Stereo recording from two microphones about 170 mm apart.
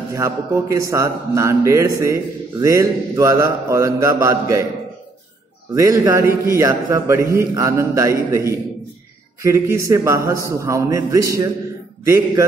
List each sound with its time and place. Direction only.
0.1 s a man's voice: 20° right (ahead or behind)
5.7 s a man's voice: 20° right (ahead or behind)